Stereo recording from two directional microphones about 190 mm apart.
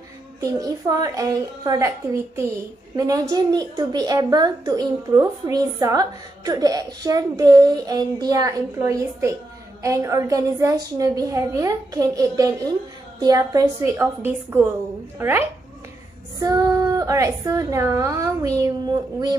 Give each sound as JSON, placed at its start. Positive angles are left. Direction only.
{"t": 0.4, "sound": "a child's voice", "side_deg": -20}